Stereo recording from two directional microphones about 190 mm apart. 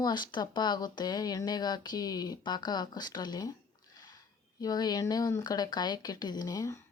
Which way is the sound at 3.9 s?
20° left (ahead or behind).